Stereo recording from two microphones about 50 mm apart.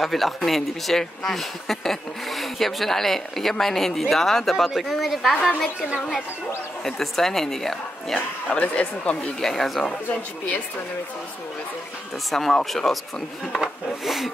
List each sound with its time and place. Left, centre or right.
0.0 s speech: centre
6.8 s a woman's voice: centre
8.5 s speech: left
9.4 s a woman's voice: centre
12.3 s speech: centre
14.0 s speech: centre